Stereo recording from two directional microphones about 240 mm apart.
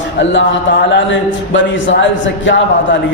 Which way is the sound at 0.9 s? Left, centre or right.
Left.